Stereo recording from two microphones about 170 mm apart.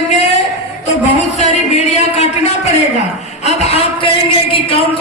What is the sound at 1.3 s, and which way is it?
Speech, 40° left (ahead or behind).